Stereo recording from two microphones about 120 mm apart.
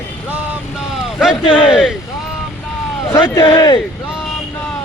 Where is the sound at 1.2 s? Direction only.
5° right (ahead or behind).